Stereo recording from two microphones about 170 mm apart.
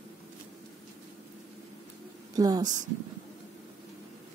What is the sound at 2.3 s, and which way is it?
Speech, 20° right (ahead or behind).